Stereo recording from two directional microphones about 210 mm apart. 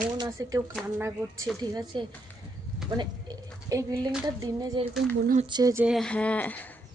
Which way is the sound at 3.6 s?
15° right (ahead or behind).